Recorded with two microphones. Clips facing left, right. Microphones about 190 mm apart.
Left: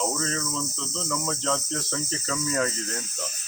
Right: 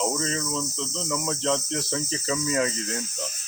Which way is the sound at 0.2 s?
20° right (ahead or behind).